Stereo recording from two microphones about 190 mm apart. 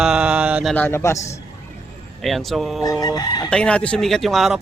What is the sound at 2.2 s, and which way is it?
Speech, centre (ahead or behind).